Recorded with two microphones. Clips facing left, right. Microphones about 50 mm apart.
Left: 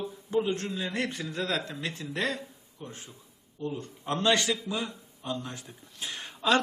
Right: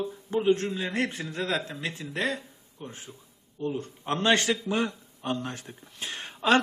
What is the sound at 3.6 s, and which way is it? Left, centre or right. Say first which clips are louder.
Speech: right 3 dB; right.